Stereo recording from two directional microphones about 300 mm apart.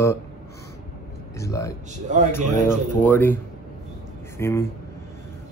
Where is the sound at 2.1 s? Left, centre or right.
Right.